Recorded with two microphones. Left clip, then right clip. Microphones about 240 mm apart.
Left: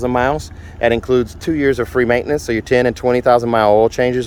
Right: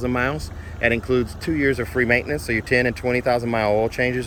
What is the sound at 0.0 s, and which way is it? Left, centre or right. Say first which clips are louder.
Speech: left 7 dB; centre.